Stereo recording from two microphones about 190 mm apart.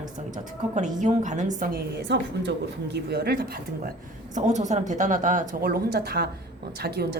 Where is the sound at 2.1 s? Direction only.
65° right (ahead or behind).